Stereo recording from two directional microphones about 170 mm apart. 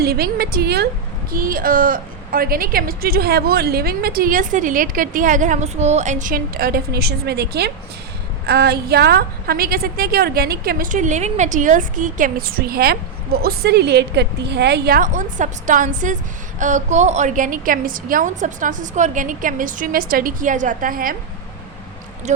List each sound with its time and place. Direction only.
0.0 s a woman's voice: 65° right (ahead or behind)
1.3 s a woman's voice: 55° right (ahead or behind)
22.3 s speech: 40° right (ahead or behind)